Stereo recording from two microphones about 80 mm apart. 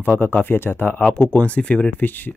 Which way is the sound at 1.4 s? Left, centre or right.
Centre.